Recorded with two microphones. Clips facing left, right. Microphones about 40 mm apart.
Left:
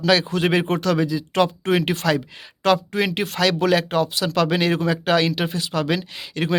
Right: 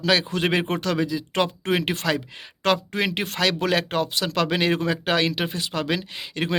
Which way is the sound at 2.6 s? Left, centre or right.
Right.